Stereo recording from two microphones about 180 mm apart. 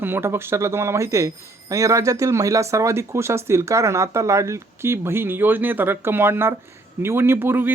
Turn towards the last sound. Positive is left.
turn(degrees=-10)  # may be behind; listen again after turning